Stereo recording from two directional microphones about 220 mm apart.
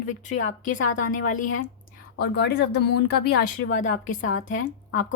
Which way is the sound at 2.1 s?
50° left (ahead or behind).